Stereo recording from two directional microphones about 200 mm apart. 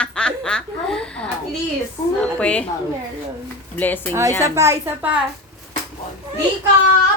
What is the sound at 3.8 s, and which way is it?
Speech, 10° left (ahead or behind).